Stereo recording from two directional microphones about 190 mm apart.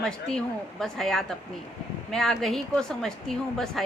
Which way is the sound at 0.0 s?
5° left (ahead or behind).